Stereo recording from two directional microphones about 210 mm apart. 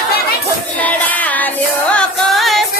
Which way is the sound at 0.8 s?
5° left (ahead or behind).